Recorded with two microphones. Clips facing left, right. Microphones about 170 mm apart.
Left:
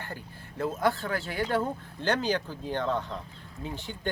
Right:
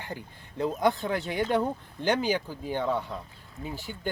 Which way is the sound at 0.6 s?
20° right (ahead or behind).